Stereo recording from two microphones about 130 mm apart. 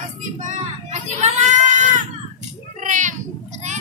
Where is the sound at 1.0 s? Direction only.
65° right (ahead or behind).